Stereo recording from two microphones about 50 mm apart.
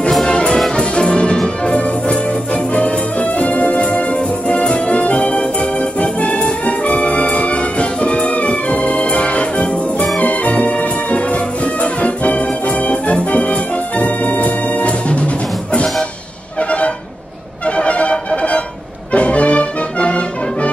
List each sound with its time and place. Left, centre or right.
0.3 s brass instrument: centre
0.6 s music: centre